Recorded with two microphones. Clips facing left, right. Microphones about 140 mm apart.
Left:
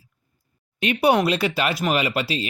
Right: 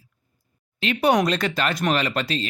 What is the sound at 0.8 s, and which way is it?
Speech, 20° left (ahead or behind).